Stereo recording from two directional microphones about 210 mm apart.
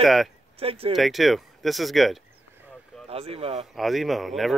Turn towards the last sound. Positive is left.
turn(degrees=0)  # may be behind; listen again after turning